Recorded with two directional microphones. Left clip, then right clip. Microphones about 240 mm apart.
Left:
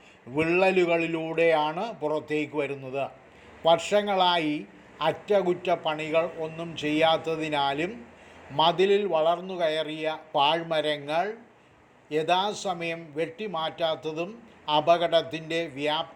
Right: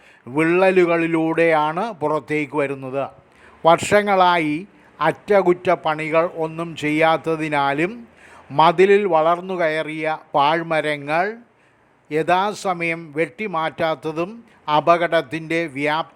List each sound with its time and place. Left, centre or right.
0.3 s a man's voice: right